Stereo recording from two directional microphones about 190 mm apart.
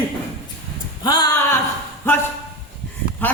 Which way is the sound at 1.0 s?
20° left (ahead or behind).